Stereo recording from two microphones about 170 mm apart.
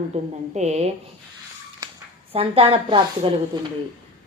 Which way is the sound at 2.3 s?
35° right (ahead or behind).